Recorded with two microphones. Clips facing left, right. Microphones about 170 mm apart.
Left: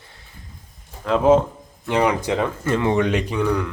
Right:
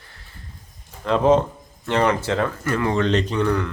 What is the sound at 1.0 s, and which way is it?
A man's voice, 5° left (ahead or behind).